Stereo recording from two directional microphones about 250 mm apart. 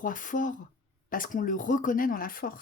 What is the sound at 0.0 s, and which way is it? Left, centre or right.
Speech, left.